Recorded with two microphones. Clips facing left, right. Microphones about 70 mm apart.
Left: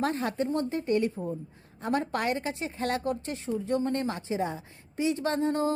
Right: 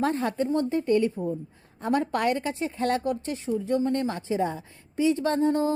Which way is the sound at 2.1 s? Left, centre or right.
Left.